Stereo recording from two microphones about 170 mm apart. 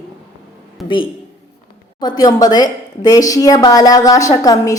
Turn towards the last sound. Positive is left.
turn(degrees=20)  # may be behind; listen again after turning